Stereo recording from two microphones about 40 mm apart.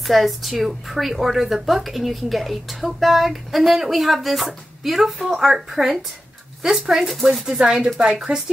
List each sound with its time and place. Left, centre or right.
0.0 s speech: centre
7.6 s speech: right